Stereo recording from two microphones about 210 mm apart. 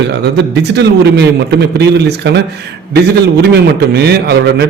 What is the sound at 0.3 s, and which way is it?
A man's voice, 55° right (ahead or behind).